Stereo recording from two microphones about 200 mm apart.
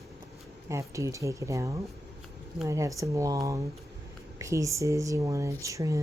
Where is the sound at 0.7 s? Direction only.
15° right (ahead or behind).